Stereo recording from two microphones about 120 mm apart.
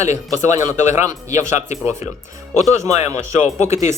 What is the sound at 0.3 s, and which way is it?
Speech, 25° right (ahead or behind).